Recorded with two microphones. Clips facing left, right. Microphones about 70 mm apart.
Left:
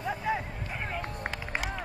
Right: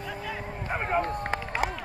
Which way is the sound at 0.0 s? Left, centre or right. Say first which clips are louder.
Left 5 dB; left.